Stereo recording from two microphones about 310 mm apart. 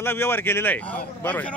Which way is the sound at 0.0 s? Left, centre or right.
Centre.